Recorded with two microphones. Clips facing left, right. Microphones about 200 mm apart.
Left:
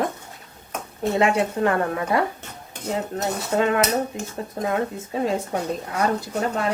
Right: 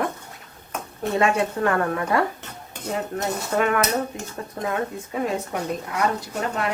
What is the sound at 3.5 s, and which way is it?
Speech, 25° left (ahead or behind).